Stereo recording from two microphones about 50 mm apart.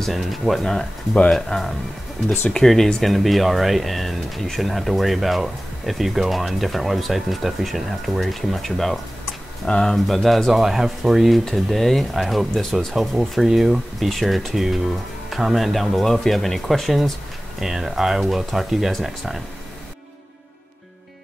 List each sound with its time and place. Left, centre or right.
0.0 s speech: centre
0.7 s speech: left
1.3 s speech: centre
9.9 s speech: centre
17.6 s speech: centre